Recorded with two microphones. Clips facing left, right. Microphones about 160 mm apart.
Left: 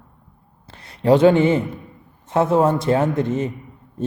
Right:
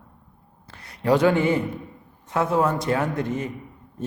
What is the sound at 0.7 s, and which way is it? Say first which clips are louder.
A man's voice: left 5 dB; 25° left (ahead or behind).